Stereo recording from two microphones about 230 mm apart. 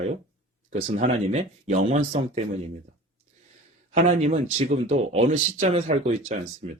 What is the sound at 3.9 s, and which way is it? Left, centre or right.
Speech, right.